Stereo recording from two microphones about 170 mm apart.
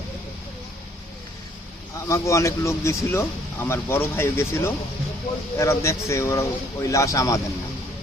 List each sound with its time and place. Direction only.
2.0 s speech: 20° left (ahead or behind)